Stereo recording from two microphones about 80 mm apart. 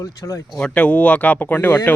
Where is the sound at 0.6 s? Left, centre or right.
Centre.